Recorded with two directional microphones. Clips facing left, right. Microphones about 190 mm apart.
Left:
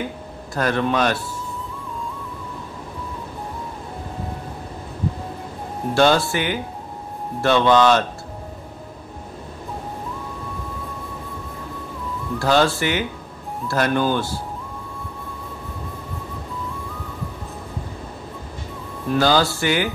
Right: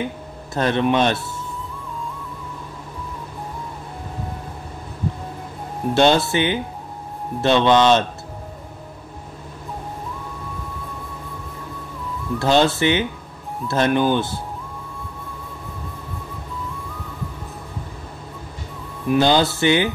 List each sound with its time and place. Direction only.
0.6 s speech: 20° right (ahead or behind)
5.9 s speech: 20° right (ahead or behind)
12.4 s speech: 20° right (ahead or behind)
19.0 s speech: 20° right (ahead or behind)